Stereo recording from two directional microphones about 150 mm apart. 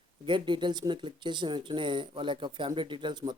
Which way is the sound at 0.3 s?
30° right (ahead or behind).